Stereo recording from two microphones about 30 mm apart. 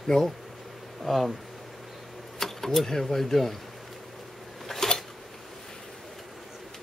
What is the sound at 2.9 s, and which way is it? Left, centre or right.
Speech, centre.